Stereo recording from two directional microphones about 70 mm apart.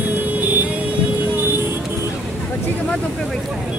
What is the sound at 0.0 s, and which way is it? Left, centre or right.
Vehicle, right.